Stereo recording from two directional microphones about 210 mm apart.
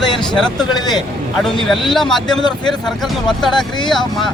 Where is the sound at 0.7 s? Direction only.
20° left (ahead or behind).